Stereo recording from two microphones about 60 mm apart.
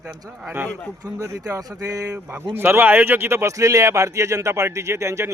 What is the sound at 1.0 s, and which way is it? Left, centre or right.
Speech, right.